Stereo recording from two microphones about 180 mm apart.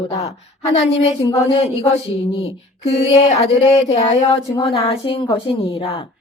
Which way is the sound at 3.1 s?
35° left (ahead or behind).